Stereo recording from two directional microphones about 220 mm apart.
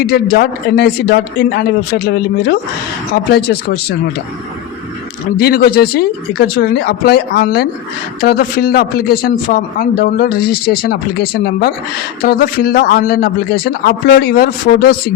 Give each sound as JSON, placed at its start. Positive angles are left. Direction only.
{"t": 0.0, "sound": "a man's voice", "side_deg": 45}
{"t": 5.4, "sound": "a man's voice", "side_deg": 45}
{"t": 12.2, "sound": "a man's voice", "side_deg": 40}